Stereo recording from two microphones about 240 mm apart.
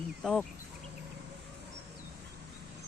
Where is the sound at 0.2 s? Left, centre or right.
Centre.